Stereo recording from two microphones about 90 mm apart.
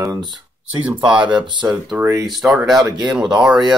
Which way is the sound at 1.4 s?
60° right (ahead or behind).